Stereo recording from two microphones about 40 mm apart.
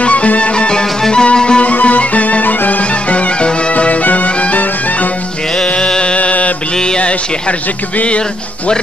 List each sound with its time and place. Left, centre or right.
0.0 s music: left
1.6 s music: left
2.4 s music: left
5.6 s music: left
6.1 s mantra: left